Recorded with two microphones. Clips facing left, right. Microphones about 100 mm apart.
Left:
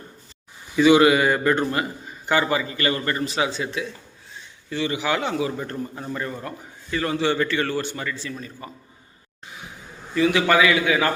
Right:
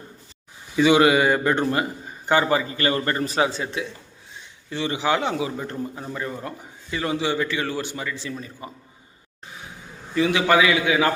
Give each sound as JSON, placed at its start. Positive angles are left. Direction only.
{"t": 0.8, "sound": "a man's voice", "side_deg": -25}
{"t": 5.5, "sound": "a man's voice", "side_deg": -15}
{"t": 10.2, "sound": "a man's voice", "side_deg": -20}